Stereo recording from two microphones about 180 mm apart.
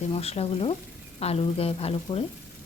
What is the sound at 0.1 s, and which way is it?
Frying, 35° left (ahead or behind).